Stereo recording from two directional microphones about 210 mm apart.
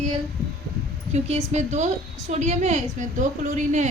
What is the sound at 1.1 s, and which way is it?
A woman's voice, 30° right (ahead or behind).